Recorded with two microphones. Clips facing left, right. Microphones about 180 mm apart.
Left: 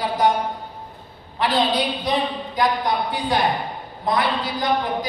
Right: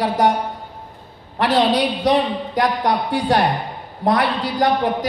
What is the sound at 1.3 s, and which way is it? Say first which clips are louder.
A woman's voice: right 4 dB; 80° right.